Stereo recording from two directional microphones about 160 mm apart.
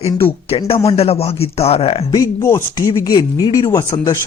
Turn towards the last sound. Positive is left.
turn(degrees=20)  # may be behind; listen again after turning